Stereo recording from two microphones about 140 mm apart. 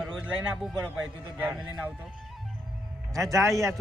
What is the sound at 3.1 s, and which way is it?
Speech, 25° right (ahead or behind).